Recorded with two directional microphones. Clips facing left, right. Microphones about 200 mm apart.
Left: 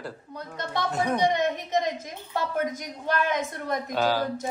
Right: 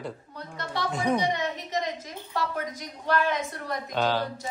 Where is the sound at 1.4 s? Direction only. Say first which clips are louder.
Left 5 dB; 50° left (ahead or behind).